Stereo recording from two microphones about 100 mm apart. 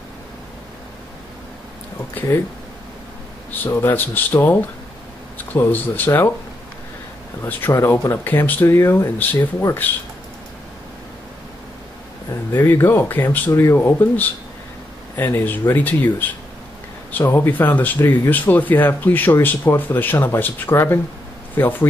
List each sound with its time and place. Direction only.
3.5 s speech: 20° left (ahead or behind)
7.4 s speech: 25° left (ahead or behind)
12.5 s speech: 25° left (ahead or behind)
13.5 s speech: 30° left (ahead or behind)
13.7 s speech: 20° left (ahead or behind)